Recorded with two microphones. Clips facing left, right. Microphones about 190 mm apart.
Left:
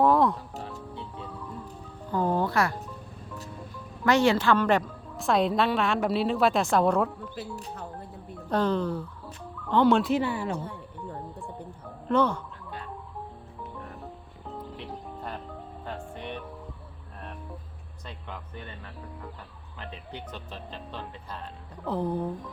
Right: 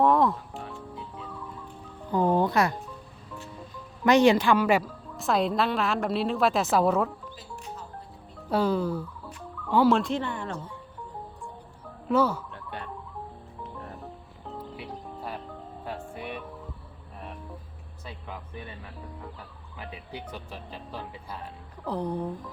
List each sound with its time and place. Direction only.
0.0 s music: centre (ahead or behind)
0.5 s music: 40° left (ahead or behind)
2.1 s music: 15° right (ahead or behind)
4.0 s a woman's voice: 15° right (ahead or behind)
8.4 s a woman's voice: 10° right (ahead or behind); by 10.6 s 10° left (ahead or behind)
12.0 s speech: 5° right (ahead or behind)
14.5 s music: 5° right (ahead or behind)
18.0 s a sound: 10° right (ahead or behind)
19.8 s speech: 10° right (ahead or behind)
21.8 s a woman's voice: centre (ahead or behind)